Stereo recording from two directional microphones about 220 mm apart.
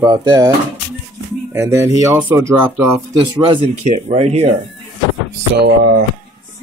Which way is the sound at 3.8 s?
30° right (ahead or behind).